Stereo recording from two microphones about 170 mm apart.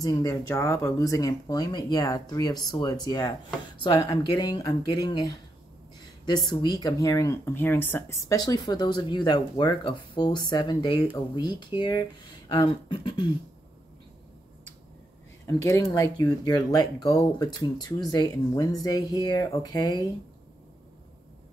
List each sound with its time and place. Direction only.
0.0 s speech: 20° left (ahead or behind)
15.4 s speech: 20° left (ahead or behind)